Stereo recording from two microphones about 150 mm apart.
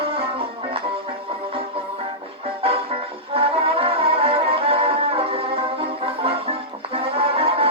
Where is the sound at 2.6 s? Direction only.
40° right (ahead or behind).